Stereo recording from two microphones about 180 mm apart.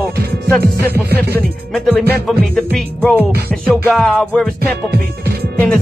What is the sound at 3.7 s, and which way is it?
Music, centre (ahead or behind).